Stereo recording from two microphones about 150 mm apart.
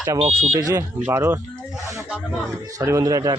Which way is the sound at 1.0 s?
15° right (ahead or behind).